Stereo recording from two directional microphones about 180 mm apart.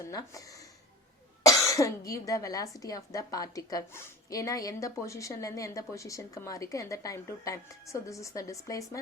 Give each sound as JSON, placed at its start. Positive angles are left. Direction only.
{"t": 0.0, "sound": "speech", "side_deg": 20}